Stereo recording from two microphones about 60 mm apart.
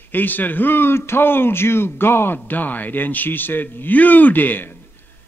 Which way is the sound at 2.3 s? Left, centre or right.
Left.